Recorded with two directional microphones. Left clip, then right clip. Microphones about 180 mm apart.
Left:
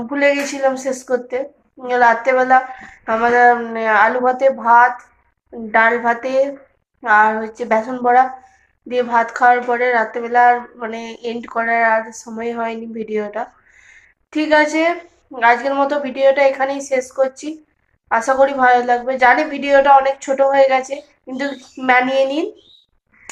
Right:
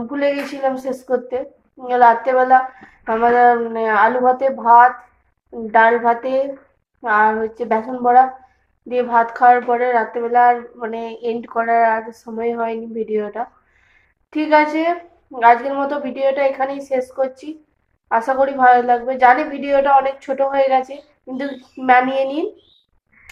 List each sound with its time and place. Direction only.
0.1 s speech: 5° right (ahead or behind)